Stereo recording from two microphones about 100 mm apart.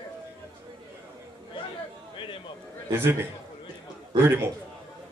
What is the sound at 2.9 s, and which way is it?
A man's voice, 25° right (ahead or behind).